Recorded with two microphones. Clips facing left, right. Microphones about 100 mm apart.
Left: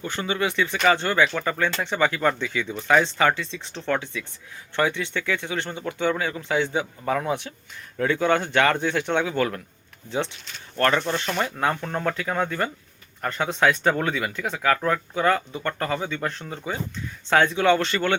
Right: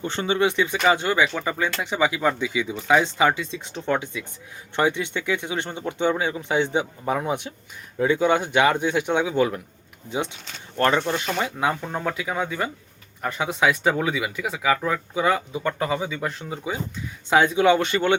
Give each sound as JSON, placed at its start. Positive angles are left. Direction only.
{"t": 0.0, "sound": "speech", "side_deg": -25}
{"t": 10.8, "sound": "speech", "side_deg": -20}